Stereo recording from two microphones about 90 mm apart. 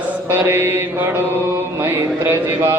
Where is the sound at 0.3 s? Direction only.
25° right (ahead or behind).